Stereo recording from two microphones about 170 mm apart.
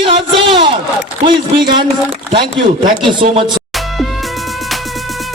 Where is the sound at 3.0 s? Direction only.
30° right (ahead or behind).